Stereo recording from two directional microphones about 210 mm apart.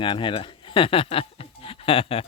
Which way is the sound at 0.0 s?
25° left (ahead or behind).